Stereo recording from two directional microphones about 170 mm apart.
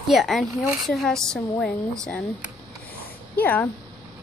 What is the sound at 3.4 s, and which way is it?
Speech, 10° left (ahead or behind).